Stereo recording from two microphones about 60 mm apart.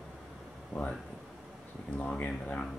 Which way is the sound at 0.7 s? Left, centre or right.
Left.